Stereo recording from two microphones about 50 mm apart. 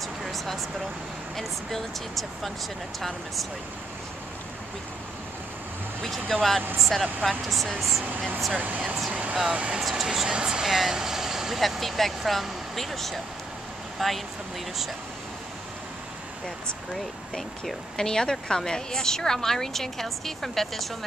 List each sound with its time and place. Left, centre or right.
0.0 s a sound: centre
1.3 s speech: centre
6.0 s speech: centre
8.5 s speech: right
9.8 s speech: centre
16.4 s speech: centre